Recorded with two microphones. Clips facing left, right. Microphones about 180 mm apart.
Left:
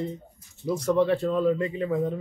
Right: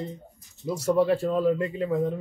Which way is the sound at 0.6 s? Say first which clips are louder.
Even; centre (ahead or behind).